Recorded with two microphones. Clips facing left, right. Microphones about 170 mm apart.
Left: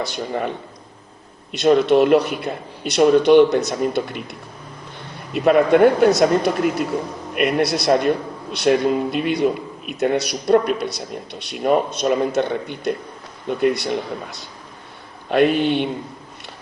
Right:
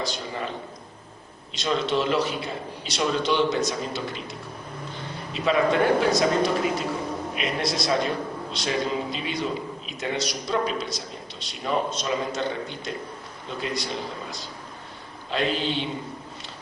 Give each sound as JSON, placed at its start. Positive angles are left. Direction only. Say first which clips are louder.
{"t": 0.0, "sound": "a man's voice", "louder": "left 6 dB", "side_deg": 60}
{"t": 1.5, "sound": "a man's voice", "louder": "left 11 dB", "side_deg": 60}